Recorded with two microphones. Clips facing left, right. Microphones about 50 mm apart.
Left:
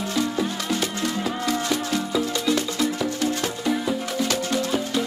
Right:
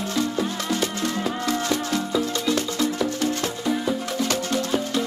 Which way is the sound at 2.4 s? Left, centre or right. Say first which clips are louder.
Even; centre.